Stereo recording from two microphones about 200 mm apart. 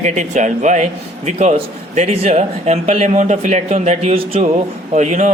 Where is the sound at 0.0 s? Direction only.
35° right (ahead or behind).